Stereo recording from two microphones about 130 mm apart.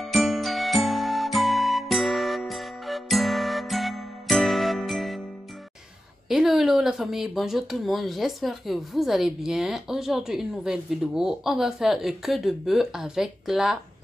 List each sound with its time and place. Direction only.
0.0 s music: centre (ahead or behind)
6.2 s speech: centre (ahead or behind)